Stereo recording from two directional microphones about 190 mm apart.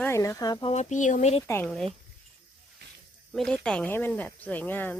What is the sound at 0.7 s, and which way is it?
Speech, 35° left (ahead or behind).